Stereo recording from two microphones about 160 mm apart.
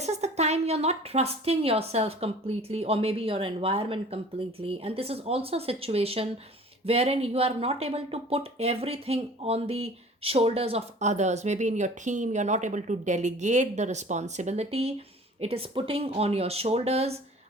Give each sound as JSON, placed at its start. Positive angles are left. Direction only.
{"t": 0.0, "sound": "speech", "side_deg": -45}